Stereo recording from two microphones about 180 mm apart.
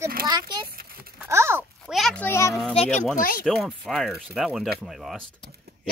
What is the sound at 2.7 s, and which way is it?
Speech, 35° left (ahead or behind).